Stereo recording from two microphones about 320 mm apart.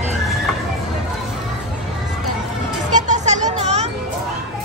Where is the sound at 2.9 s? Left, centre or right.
Right.